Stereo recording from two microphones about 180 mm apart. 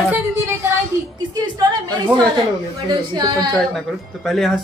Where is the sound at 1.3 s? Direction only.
25° right (ahead or behind).